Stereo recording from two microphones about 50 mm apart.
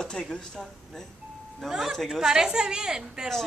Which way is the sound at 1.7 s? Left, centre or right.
Centre.